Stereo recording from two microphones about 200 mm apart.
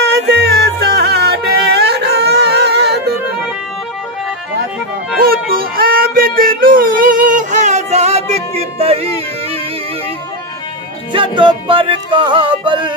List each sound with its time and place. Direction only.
0.0 s music: 55° right (ahead or behind)
5.2 s music: 50° right (ahead or behind); by 9.0 s 30° right (ahead or behind)
11.1 s music: 25° right (ahead or behind)